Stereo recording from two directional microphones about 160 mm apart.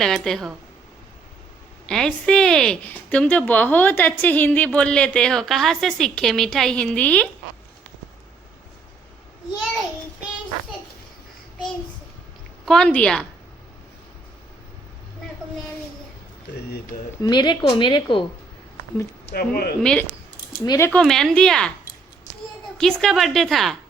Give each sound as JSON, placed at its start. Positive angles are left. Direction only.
{"t": 0.0, "sound": "a woman's voice", "side_deg": 0}
{"t": 1.9, "sound": "a woman's voice", "side_deg": 5}
{"t": 12.6, "sound": "a woman's voice", "side_deg": 5}
{"t": 17.2, "sound": "a woman's voice", "side_deg": 30}
{"t": 19.2, "sound": "speech", "side_deg": 75}
{"t": 19.8, "sound": "a woman's voice", "side_deg": 5}
{"t": 20.7, "sound": "speech", "side_deg": 15}
{"t": 20.9, "sound": "a woman's voice", "side_deg": 5}
{"t": 22.8, "sound": "a woman's voice", "side_deg": 5}